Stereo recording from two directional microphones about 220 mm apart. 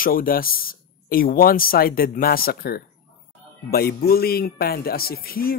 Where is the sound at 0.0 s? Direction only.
40° left (ahead or behind).